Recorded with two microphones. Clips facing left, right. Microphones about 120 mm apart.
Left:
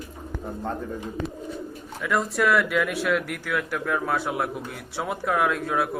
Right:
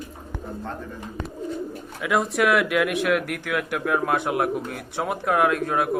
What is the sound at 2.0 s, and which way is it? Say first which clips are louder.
Speech: right 2 dB; 5° right (ahead or behind).